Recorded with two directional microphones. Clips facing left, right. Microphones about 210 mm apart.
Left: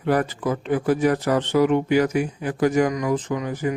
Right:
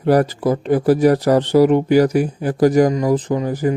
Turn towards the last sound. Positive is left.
turn(degrees=-35)  # may be behind; listen again after turning